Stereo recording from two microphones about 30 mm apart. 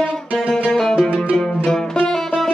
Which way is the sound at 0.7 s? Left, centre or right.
Left.